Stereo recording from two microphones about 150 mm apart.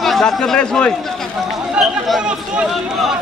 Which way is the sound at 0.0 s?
Centre (ahead or behind).